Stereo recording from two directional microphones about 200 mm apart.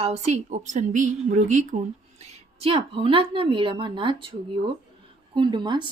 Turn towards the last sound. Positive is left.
turn(degrees=-20)  # may be behind; listen again after turning